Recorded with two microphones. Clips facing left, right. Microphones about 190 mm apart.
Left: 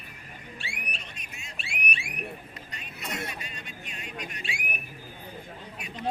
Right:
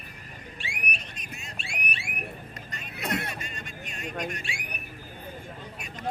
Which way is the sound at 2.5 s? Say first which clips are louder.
Right 2 dB; 45° right (ahead or behind).